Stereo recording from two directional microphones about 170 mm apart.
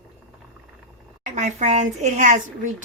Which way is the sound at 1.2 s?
45° right (ahead or behind).